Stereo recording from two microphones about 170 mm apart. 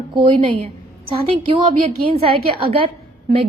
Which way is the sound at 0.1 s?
30° right (ahead or behind).